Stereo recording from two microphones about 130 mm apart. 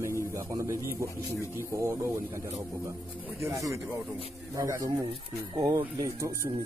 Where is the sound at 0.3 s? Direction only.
20° right (ahead or behind).